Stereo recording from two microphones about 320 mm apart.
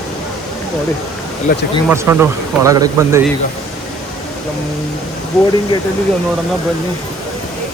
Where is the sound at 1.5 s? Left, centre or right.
Left.